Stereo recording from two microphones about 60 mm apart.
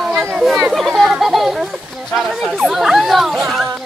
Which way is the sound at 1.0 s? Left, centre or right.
Centre.